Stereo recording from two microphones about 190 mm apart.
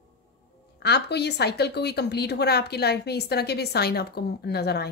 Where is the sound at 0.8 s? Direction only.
60° left (ahead or behind).